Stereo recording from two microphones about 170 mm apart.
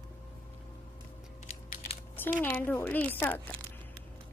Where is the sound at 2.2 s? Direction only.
10° left (ahead or behind).